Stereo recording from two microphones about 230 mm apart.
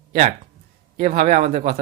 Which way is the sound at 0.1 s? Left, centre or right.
Right.